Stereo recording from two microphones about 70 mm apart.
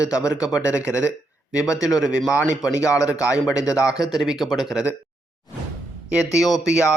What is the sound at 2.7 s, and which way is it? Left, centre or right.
Speech, left.